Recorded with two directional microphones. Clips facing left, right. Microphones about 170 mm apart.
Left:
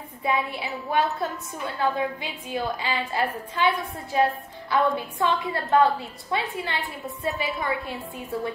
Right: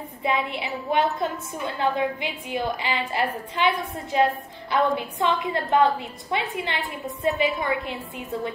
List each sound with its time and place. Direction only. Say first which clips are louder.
0.2 s a woman's voice: right 1 dB; 20° right (ahead or behind)